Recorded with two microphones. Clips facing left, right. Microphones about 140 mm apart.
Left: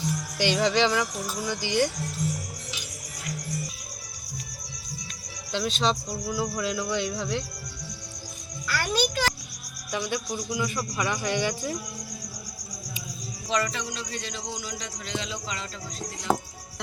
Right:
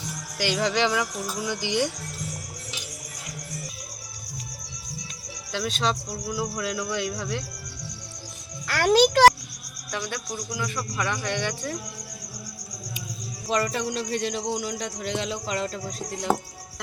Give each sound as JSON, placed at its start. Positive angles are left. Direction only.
{"t": 0.3, "sound": "music", "side_deg": -5}
{"t": 5.5, "sound": "speech", "side_deg": -5}
{"t": 8.6, "sound": "music", "side_deg": -85}
{"t": 9.9, "sound": "speech", "side_deg": 5}
{"t": 13.5, "sound": "speech", "side_deg": -50}
{"t": 16.3, "sound": "speech", "side_deg": -5}